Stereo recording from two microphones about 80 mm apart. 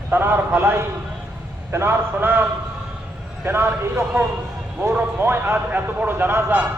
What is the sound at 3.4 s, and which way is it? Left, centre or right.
A man's voice, right.